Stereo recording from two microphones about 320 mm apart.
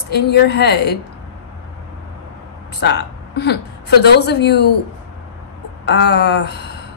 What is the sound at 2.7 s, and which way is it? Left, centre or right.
A woman's voice, left.